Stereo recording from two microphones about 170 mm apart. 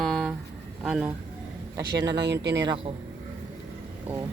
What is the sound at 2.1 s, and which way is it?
Speech, 85° right.